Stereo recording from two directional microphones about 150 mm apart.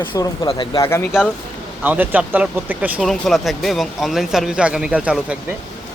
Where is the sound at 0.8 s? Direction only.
15° left (ahead or behind).